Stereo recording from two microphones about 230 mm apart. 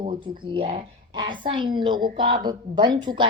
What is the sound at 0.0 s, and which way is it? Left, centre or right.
Speech, right.